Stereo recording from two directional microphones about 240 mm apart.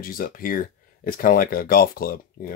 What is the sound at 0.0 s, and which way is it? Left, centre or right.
Speech, left.